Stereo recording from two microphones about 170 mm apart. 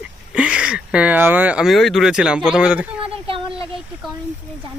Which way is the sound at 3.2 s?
30° right (ahead or behind).